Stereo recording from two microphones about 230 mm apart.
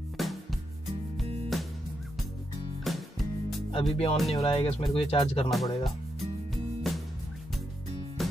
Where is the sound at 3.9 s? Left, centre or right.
Left.